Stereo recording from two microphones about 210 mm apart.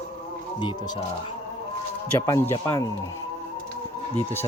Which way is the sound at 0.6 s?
20° left (ahead or behind).